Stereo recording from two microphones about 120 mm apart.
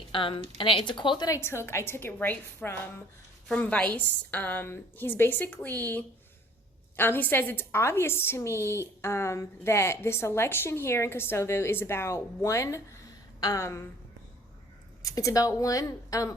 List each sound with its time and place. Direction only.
0.1 s speech: 45° left (ahead or behind)
1.3 s a woman's voice: 20° left (ahead or behind)
15.0 s a woman's voice: 30° left (ahead or behind)